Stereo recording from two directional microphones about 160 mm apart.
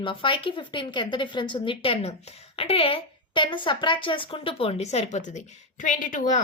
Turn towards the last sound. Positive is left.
turn(degrees=55)  # may be behind; listen again after turning